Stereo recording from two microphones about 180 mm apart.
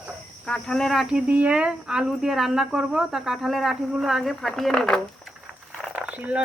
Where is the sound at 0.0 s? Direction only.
Centre (ahead or behind).